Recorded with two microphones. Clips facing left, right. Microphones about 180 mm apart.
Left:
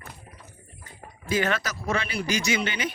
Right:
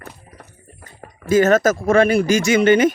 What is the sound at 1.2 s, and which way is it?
Speech, 45° right (ahead or behind).